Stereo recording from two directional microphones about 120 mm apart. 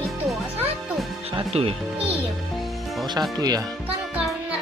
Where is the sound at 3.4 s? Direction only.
30° right (ahead or behind).